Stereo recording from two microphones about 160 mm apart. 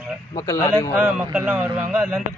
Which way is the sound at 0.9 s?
10° right (ahead or behind).